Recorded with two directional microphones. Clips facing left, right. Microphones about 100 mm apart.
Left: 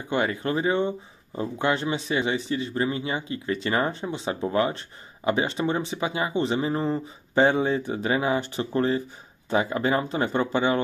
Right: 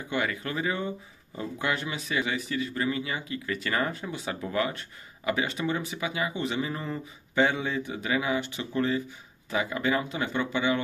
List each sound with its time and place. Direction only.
0.1 s speech: 30° left (ahead or behind)